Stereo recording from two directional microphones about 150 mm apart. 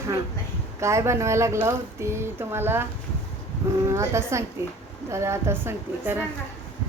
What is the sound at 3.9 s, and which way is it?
A woman's voice, 20° right (ahead or behind).